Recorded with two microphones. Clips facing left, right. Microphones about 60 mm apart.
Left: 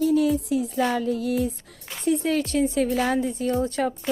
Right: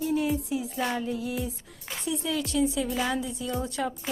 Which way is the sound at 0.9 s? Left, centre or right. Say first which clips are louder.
Left 6 dB; left.